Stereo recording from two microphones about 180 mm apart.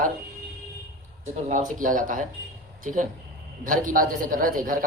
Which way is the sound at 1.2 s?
40° right (ahead or behind).